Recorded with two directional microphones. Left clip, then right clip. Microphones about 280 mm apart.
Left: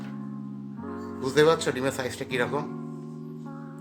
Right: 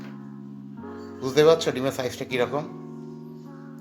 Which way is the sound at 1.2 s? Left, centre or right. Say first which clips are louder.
Right 3 dB; centre.